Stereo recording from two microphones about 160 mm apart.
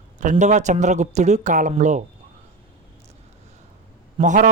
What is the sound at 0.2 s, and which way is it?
Speech, 50° right (ahead or behind).